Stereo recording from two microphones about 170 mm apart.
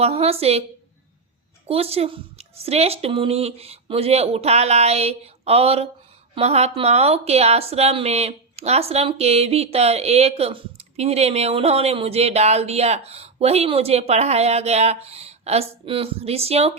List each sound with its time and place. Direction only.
0.0 s a woman's voice: 35° right (ahead or behind)
1.6 s a woman's voice: 35° right (ahead or behind)